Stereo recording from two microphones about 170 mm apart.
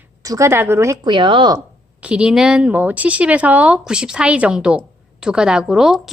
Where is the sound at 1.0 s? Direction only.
30° right (ahead or behind).